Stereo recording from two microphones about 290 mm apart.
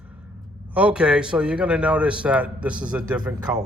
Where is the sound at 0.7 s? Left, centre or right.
Centre.